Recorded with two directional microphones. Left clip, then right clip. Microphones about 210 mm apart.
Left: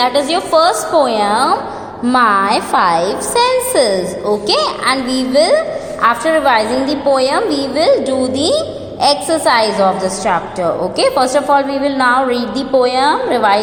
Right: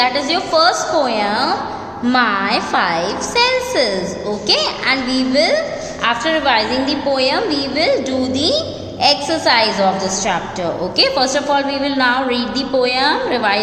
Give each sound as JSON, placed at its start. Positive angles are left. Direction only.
{"t": 0.0, "sound": "a woman's voice", "side_deg": 20}